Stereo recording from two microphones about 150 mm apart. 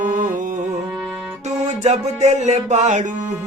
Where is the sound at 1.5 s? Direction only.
50° right (ahead or behind).